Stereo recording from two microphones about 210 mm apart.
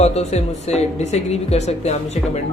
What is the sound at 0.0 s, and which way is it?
A woman's voice, 30° left (ahead or behind).